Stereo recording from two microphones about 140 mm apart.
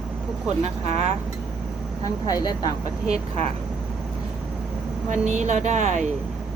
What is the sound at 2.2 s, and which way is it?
Speech, 25° left (ahead or behind).